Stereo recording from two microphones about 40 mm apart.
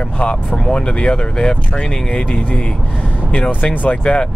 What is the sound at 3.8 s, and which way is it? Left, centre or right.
Speech, left.